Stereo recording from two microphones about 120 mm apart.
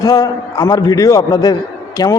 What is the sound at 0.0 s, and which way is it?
A man's voice, 30° left (ahead or behind).